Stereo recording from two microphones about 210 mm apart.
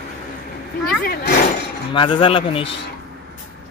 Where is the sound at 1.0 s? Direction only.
50° left (ahead or behind).